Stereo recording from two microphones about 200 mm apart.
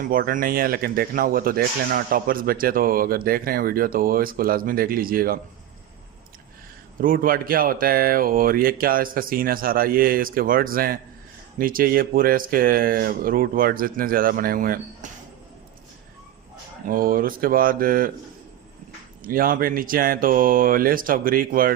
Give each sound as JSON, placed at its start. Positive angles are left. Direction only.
{"t": 0.0, "sound": "speech", "side_deg": -45}
{"t": 7.0, "sound": "speech", "side_deg": -45}
{"t": 16.8, "sound": "speech", "side_deg": -45}
{"t": 19.2, "sound": "speech", "side_deg": -45}